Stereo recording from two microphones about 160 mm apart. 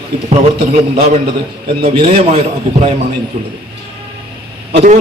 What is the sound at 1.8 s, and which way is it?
Speech, 35° right (ahead or behind).